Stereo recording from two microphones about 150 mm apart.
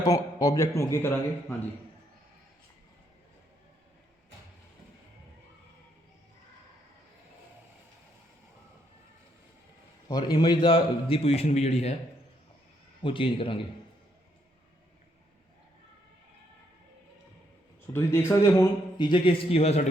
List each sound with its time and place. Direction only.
0.0 s a man's voice: 20° left (ahead or behind)
10.1 s a man's voice: 30° left (ahead or behind); by 11.9 s 45° left (ahead or behind)
13.0 s a man's voice: 35° left (ahead or behind)
17.9 s speech: 15° left (ahead or behind)
18.9 s a man's voice: 30° left (ahead or behind)